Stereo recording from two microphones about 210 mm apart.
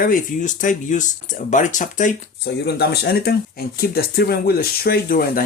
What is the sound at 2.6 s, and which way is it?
Speech, 50° left (ahead or behind).